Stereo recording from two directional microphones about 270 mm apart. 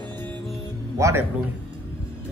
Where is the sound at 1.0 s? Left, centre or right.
Centre.